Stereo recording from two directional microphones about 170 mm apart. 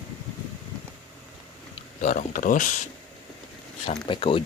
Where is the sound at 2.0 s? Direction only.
50° left (ahead or behind).